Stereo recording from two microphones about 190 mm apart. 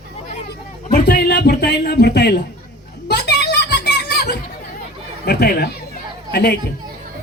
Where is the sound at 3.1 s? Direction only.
60° left (ahead or behind).